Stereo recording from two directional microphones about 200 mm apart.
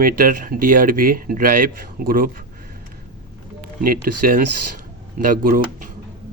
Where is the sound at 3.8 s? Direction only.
45° right (ahead or behind).